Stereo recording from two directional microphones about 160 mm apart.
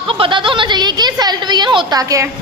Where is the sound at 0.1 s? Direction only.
30° right (ahead or behind).